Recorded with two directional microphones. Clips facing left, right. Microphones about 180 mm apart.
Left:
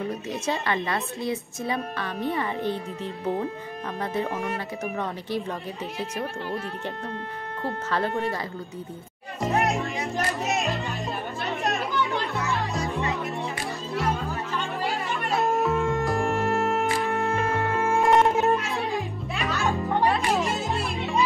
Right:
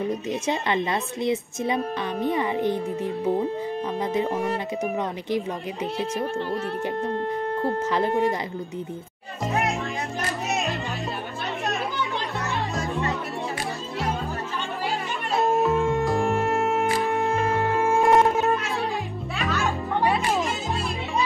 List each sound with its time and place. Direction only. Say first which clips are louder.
0.1 s a woman's voice: right 3 dB; 20° right (ahead or behind)
4.3 s speech: right 4 dB; 35° right (ahead or behind)
7.9 s speech: right 3 dB; 15° right (ahead or behind)
9.4 s music: left 1 dB; centre (ahead or behind)
15.6 s music: right 2 dB; centre (ahead or behind)